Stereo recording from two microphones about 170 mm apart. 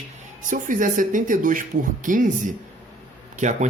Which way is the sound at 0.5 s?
50° right (ahead or behind).